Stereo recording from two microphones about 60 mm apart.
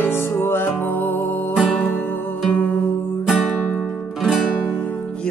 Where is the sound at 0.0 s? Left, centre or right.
Left.